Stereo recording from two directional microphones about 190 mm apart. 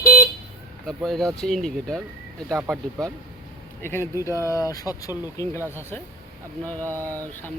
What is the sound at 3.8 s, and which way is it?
Speech, 15° left (ahead or behind).